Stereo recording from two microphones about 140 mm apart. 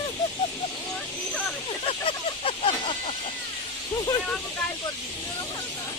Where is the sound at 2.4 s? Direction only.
45° left (ahead or behind).